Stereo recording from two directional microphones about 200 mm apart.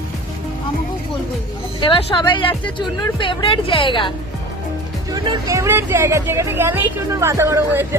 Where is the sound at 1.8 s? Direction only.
25° left (ahead or behind).